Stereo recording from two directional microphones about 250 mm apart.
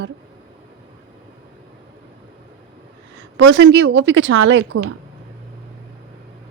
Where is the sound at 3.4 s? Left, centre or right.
Right.